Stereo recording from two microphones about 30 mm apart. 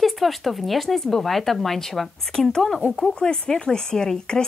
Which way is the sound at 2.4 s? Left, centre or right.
Left.